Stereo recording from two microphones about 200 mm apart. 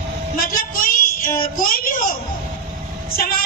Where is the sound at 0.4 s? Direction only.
45° left (ahead or behind).